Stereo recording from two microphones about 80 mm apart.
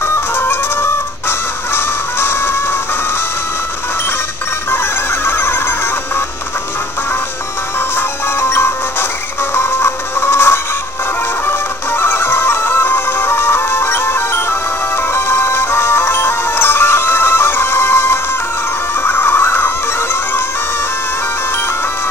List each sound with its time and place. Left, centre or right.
0.0 s music: left
4.6 s music: left
7.9 s music: left